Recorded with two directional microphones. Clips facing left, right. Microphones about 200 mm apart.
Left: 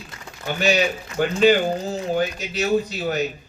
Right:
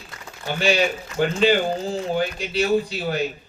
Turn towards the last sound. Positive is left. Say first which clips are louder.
# even
turn(degrees=45)  # may be behind; listen again after turning